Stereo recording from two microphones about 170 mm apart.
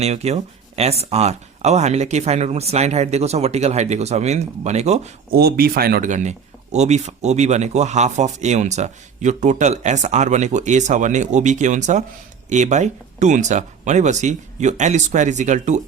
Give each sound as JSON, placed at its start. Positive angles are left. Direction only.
{"t": 0.0, "sound": "speech", "side_deg": -40}
{"t": 5.3, "sound": "speech", "side_deg": -65}